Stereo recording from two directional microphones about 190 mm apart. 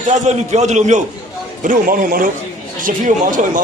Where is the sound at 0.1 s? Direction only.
40° right (ahead or behind).